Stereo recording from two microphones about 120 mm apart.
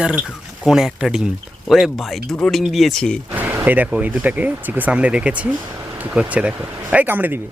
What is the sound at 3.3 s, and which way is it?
Speech, 20° right (ahead or behind).